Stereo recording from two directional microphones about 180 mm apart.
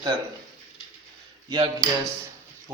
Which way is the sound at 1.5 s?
20° right (ahead or behind).